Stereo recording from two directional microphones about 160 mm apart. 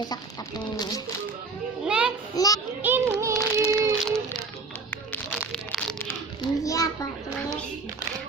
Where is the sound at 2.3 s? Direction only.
20° left (ahead or behind).